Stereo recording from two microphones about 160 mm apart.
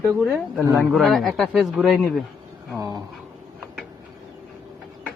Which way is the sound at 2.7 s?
20° right (ahead or behind).